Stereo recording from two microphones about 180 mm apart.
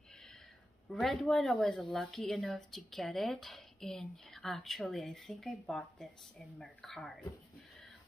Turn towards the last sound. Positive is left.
turn(degrees=0)  # may be behind; listen again after turning